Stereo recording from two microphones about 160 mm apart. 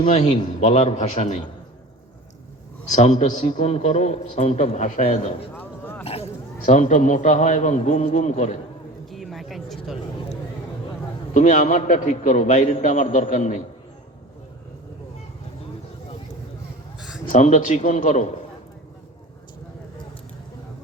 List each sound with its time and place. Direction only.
0.0 s a man's voice: 50° left (ahead or behind)
2.9 s a man's voice: 50° left (ahead or behind)
5.5 s a sound: 10° left (ahead or behind)
6.1 s a man's voice: 40° left (ahead or behind)
9.0 s a sound: centre (ahead or behind)
11.3 s a man's voice: 50° left (ahead or behind)
17.2 s a man's voice: 50° left (ahead or behind)